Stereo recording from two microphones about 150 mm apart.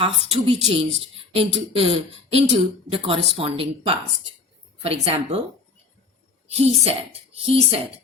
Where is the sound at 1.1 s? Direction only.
40° right (ahead or behind).